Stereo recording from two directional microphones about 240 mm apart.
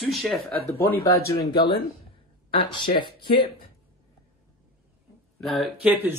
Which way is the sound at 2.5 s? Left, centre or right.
Centre.